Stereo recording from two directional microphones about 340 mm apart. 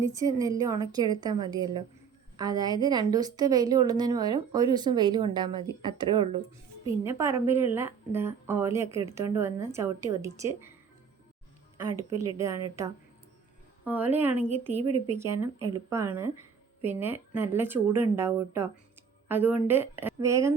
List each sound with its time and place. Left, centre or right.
0.0 s a woman's voice: centre
12.2 s a woman's voice: centre
14.5 s a woman's voice: centre
14.8 s speech: right
15.2 s a woman's voice: centre